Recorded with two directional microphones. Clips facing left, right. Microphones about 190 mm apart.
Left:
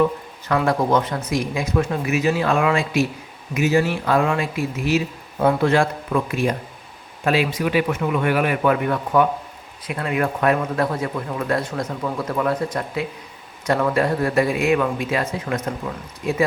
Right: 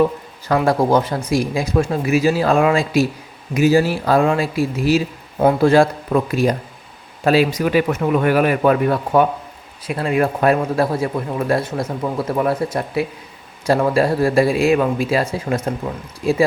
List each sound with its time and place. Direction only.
0.0 s a man's voice: 35° right (ahead or behind)